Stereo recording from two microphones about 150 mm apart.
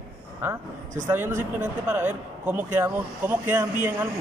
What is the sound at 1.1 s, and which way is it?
A man's voice, 15° right (ahead or behind).